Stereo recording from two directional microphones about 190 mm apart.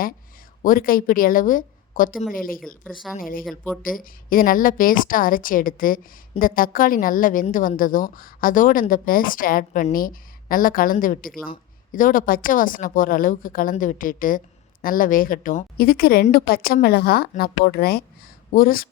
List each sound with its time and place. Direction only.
0.6 s a woman's voice: 50° left (ahead or behind)
2.8 s speech: centre (ahead or behind)
3.2 s a woman's voice: 50° left (ahead or behind)